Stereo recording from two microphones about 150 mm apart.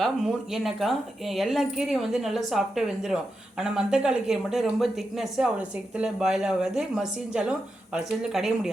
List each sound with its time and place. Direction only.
0.0 s speech: centre (ahead or behind)